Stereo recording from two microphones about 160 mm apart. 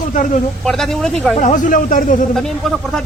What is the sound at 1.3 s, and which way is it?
Speech, 50° left (ahead or behind).